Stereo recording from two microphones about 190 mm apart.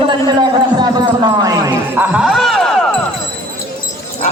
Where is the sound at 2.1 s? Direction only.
Centre (ahead or behind).